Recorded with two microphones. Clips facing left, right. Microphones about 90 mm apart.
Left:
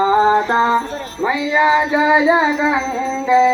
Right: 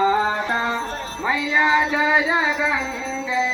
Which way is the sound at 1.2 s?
15° left (ahead or behind).